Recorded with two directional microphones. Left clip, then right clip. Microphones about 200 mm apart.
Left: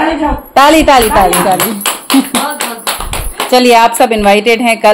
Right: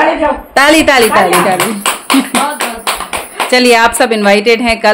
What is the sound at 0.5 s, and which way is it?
Speech, centre (ahead or behind).